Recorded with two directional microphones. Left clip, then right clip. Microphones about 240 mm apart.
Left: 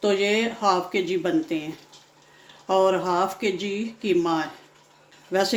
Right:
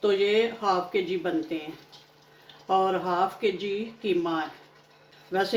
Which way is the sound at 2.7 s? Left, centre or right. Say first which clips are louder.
Left 4 dB; left.